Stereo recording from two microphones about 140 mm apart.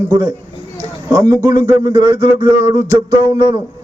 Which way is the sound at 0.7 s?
20° right (ahead or behind).